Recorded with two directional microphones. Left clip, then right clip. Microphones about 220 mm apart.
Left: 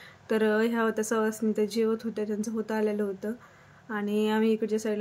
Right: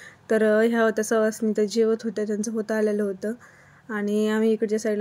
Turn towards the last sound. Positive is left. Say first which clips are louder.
# right 4 dB
turn(degrees=-20)  # may be behind; listen again after turning